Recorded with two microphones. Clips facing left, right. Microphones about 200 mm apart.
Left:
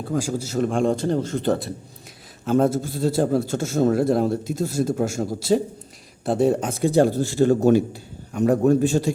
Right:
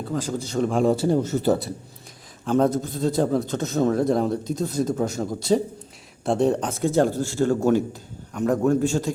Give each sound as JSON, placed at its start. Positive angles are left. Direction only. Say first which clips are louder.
{"t": 0.1, "sound": "a man's voice", "louder": "left 3 dB", "side_deg": 10}